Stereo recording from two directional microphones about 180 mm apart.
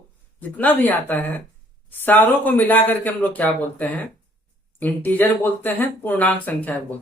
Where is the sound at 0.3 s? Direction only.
10° left (ahead or behind).